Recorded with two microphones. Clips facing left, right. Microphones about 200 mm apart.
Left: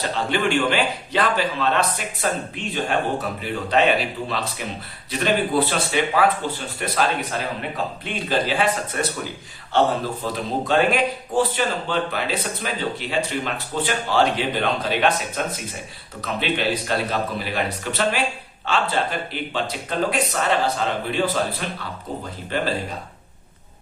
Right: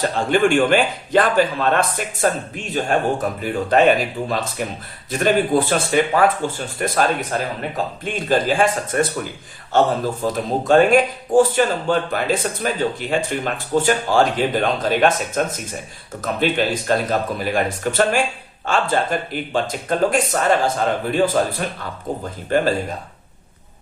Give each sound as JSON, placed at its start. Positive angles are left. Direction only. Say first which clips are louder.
{"t": 0.0, "sound": "speech", "louder": "right 5 dB", "side_deg": -45}
{"t": 22.4, "sound": "speech", "louder": "right 7 dB", "side_deg": -45}